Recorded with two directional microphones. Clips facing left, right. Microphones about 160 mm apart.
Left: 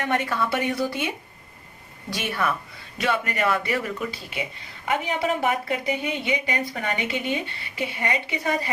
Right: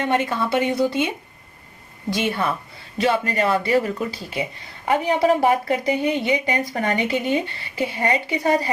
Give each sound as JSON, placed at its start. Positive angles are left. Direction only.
{"t": 0.0, "sound": "a woman's voice", "side_deg": -25}